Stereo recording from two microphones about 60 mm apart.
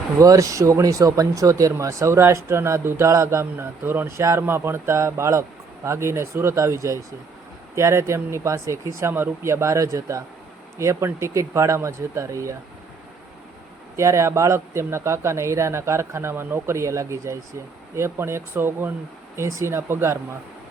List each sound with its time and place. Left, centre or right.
0.2 s speech: right
13.9 s speech: right
19.4 s speech: right